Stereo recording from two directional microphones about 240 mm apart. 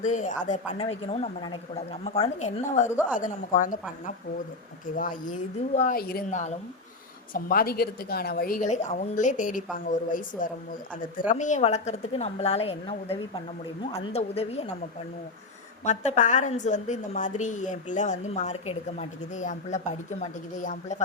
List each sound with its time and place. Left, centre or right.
0.0 s a woman's voice: left
2.9 s a woman's voice: centre
3.2 s a woman's voice: left
15.8 s a woman's voice: left